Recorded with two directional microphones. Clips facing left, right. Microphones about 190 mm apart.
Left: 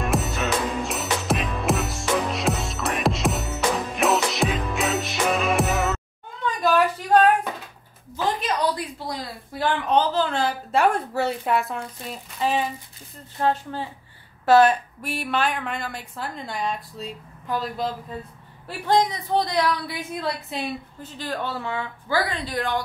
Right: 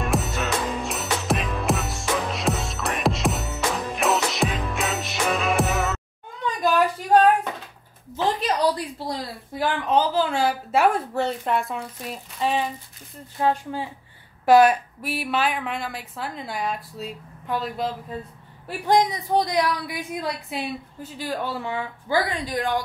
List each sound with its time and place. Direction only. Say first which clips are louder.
0.0 s music: left 1 dB; centre (ahead or behind)
8.2 s a sound: right 2 dB; 35° right (ahead or behind)
9.8 s a sound: right 1 dB; 5° right (ahead or behind)
11.1 s a woman's voice: left 1 dB; 5° left (ahead or behind)
13.4 s a woman's voice: right 1 dB; 10° right (ahead or behind)
18.9 s a woman's voice: right 1 dB; 15° right (ahead or behind)